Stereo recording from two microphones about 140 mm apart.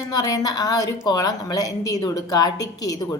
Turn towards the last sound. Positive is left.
turn(degrees=25)  # may be behind; listen again after turning